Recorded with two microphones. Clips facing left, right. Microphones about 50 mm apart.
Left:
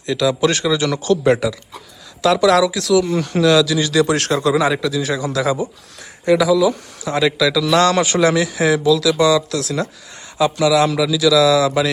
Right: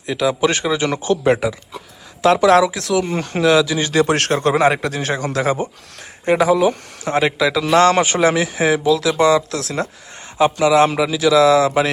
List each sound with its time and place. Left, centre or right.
0.0 s speech: centre
2.2 s speech: right
7.2 s speech: right